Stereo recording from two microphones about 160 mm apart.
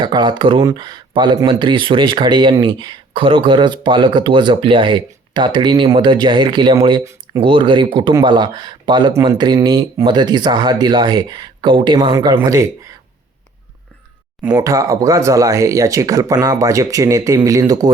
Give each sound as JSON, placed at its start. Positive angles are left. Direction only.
{"t": 0.0, "sound": "speech", "side_deg": -30}
{"t": 14.4, "sound": "speech", "side_deg": -20}